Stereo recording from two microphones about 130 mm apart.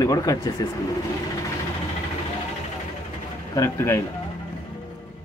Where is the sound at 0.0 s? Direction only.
30° left (ahead or behind).